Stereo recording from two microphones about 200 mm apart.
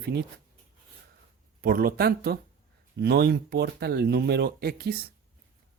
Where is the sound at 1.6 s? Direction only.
45° right (ahead or behind).